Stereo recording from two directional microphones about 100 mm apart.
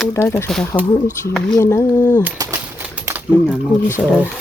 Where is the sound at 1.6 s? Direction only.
25° left (ahead or behind).